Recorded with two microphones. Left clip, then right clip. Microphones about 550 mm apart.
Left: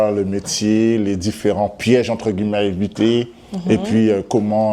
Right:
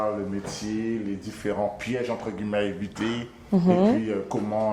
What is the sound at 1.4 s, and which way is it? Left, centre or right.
Speech, left.